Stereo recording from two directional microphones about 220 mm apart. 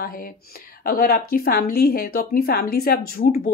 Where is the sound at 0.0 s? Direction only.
45° left (ahead or behind).